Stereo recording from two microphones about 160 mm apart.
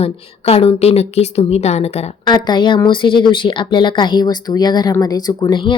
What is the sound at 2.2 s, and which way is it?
A woman's voice, 25° left (ahead or behind).